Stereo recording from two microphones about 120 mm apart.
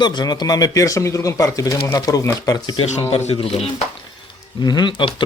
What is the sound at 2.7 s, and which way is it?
Speech, 70° left (ahead or behind).